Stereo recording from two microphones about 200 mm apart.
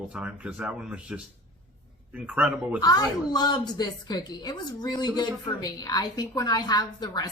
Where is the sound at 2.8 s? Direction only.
20° left (ahead or behind).